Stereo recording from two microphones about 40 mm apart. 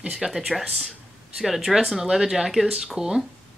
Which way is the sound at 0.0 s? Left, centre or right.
Right.